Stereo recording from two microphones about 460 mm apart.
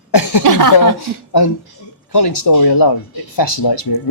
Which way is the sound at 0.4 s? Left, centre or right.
Right.